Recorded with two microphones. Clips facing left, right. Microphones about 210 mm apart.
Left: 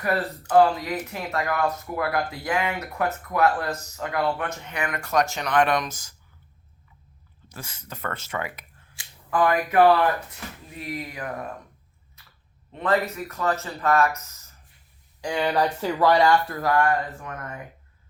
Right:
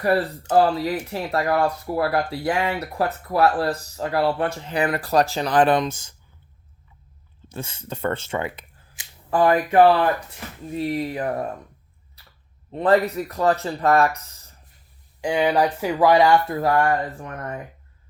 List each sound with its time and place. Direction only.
0.0 s speech: 30° right (ahead or behind)
7.4 s speech: 25° right (ahead or behind)
12.2 s a sound: 35° right (ahead or behind)
12.7 s speech: 35° right (ahead or behind)
15.2 s speech: 15° right (ahead or behind); by 17.6 s 35° right (ahead or behind)